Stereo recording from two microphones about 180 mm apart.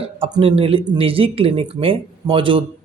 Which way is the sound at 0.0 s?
30° right (ahead or behind).